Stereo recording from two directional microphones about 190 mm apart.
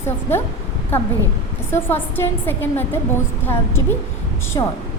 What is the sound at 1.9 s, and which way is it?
A woman's voice, 10° left (ahead or behind).